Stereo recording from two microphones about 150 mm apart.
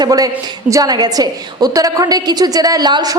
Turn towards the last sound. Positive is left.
turn(degrees=-30)  # may be behind; listen again after turning